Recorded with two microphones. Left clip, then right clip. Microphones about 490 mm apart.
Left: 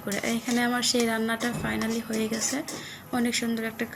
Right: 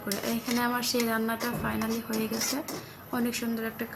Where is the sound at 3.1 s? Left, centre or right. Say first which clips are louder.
Left 3 dB; right.